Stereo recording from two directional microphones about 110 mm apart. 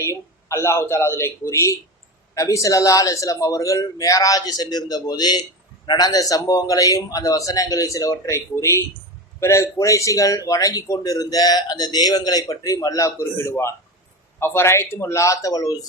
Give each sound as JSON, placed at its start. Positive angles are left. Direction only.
{"t": 0.0, "sound": "a man's voice", "side_deg": 25}